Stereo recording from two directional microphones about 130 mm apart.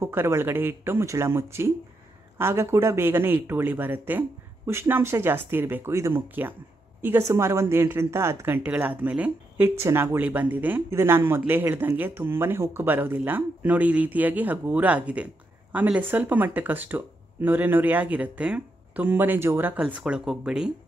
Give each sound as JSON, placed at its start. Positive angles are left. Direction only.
{"t": 0.0, "sound": "a woman's voice", "side_deg": -20}